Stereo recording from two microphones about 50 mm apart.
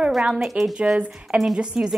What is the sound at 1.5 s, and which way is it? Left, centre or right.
Speech, centre.